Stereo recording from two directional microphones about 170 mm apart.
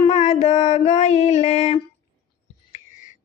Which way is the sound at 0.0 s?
40° left (ahead or behind).